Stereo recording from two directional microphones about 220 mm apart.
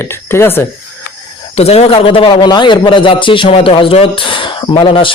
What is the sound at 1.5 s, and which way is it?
A man's voice, 30° left (ahead or behind).